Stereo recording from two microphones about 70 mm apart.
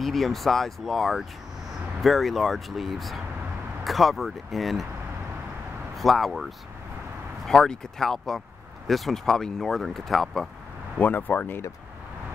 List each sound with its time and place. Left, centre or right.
0.0 s speech: centre
5.9 s speech: centre
7.4 s speech: centre
11.0 s speech: left